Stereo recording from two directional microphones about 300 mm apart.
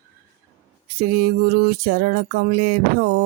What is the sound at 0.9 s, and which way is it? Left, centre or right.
Music, right.